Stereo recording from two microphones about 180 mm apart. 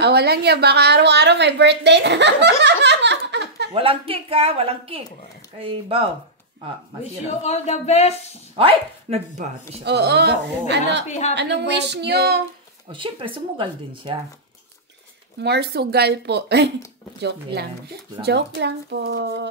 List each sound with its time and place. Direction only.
0.0 s a woman's voice: 65° right (ahead or behind)
3.7 s speech: 30° right (ahead or behind)
7.4 s speech: 40° left (ahead or behind)
8.5 s speech: 35° right (ahead or behind)
9.8 s a woman's voice: 65° right (ahead or behind)
11.1 s speech: 40° left (ahead or behind)
11.3 s a woman's voice: 75° right (ahead or behind)
12.9 s speech: 30° right (ahead or behind)
15.4 s a woman's voice: 65° right (ahead or behind)